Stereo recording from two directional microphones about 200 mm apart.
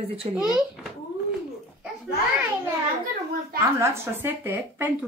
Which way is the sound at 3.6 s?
10° right (ahead or behind).